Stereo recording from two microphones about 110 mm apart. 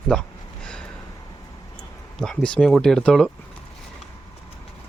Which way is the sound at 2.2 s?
10° left (ahead or behind).